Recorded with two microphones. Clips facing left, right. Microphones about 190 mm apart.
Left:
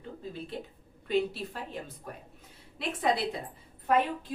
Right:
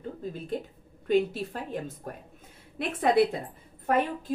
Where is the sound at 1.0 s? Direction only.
50° right (ahead or behind).